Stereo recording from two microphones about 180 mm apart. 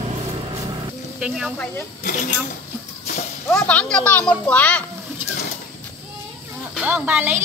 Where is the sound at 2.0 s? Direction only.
50° left (ahead or behind).